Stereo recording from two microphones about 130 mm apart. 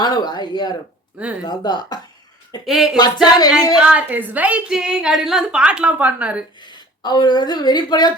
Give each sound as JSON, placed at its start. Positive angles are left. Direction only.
{"t": 0.0, "sound": "speech", "side_deg": 30}
{"t": 2.6, "sound": "a sound", "side_deg": -5}
{"t": 3.2, "sound": "speech", "side_deg": 30}
{"t": 3.8, "sound": "a woman's voice", "side_deg": -10}
{"t": 6.6, "sound": "a woman's voice", "side_deg": 35}